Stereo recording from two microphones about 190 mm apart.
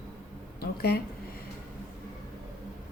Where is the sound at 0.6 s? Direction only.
55° left (ahead or behind).